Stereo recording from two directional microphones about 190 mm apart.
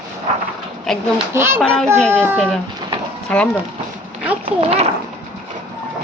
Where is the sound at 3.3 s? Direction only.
5° left (ahead or behind).